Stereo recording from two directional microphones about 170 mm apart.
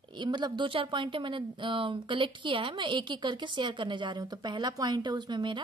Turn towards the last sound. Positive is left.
turn(degrees=-25)  # may be behind; listen again after turning